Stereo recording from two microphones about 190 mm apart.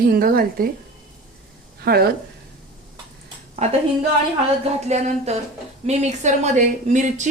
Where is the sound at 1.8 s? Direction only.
55° right (ahead or behind).